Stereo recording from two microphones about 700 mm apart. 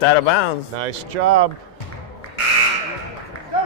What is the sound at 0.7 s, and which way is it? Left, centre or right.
Speech, right.